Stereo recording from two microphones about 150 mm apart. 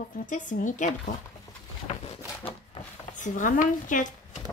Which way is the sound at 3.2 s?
60° left (ahead or behind).